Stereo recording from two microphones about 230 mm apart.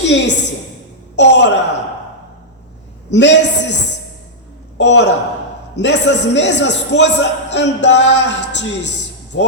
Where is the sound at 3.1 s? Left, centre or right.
Left.